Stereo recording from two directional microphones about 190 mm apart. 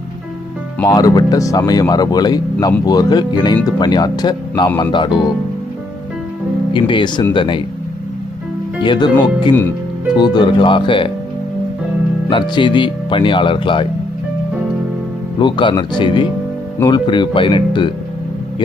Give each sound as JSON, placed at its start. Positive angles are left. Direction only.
{"t": 0.9, "sound": "speech", "side_deg": 20}
{"t": 6.7, "sound": "speech", "side_deg": 25}
{"t": 8.8, "sound": "speech", "side_deg": 25}
{"t": 12.3, "sound": "speech", "side_deg": 25}
{"t": 15.4, "sound": "speech", "side_deg": 25}